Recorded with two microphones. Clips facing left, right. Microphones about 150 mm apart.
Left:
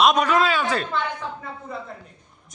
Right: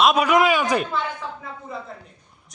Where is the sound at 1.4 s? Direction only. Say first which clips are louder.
Even; centre (ahead or behind).